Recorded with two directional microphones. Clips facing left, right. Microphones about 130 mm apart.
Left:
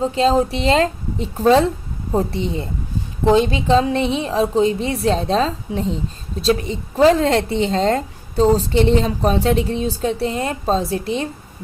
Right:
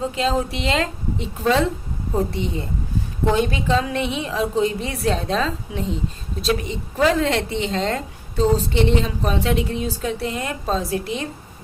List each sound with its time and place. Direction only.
0.0 s a woman's voice: 30° left (ahead or behind)